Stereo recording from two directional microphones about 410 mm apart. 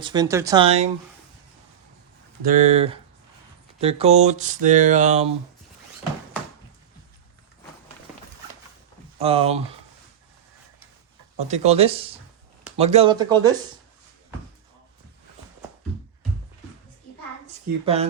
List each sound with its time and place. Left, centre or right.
0.0 s speech: centre
2.4 s speech: centre
9.1 s speech: centre
11.3 s speech: centre
17.4 s a child's voice: centre